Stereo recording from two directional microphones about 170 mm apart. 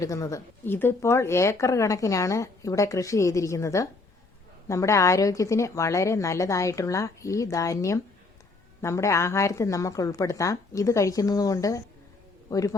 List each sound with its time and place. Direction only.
0.0 s a man's voice: 20° left (ahead or behind)